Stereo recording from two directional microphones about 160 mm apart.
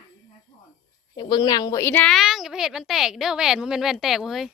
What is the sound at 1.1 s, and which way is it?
A woman's voice, 30° left (ahead or behind).